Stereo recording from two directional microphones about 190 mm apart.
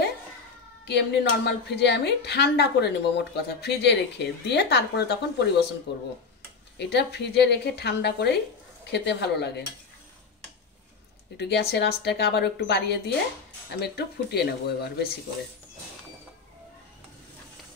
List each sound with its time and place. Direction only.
0.8 s a woman's voice: 60° left (ahead or behind)
11.3 s a woman's voice: 60° left (ahead or behind)